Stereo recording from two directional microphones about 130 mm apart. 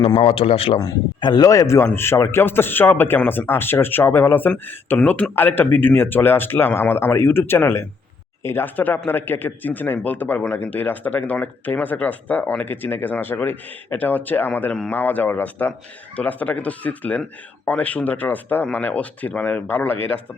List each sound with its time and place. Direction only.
0.0 s a man's voice: 40° left (ahead or behind)
0.8 s speech: 30° left (ahead or behind); by 20.0 s 15° left (ahead or behind)